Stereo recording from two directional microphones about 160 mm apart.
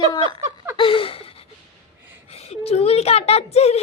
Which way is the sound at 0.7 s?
35° left (ahead or behind).